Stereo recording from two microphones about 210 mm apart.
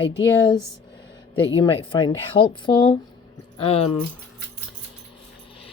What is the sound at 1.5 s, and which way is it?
Speech, 20° left (ahead or behind).